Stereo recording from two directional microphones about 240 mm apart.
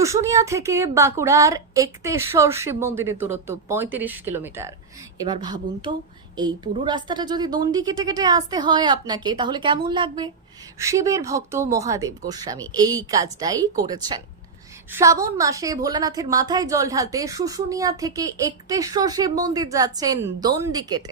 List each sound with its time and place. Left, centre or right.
0.0 s a woman's voice: centre